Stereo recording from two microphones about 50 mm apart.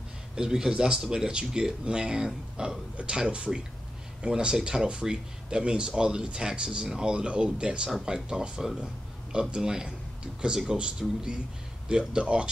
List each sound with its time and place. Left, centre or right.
0.4 s speech: centre